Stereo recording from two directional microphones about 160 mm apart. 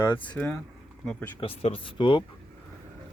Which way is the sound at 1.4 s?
35° left (ahead or behind).